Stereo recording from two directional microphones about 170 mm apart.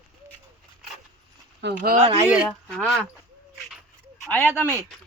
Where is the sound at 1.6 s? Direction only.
75° right (ahead or behind).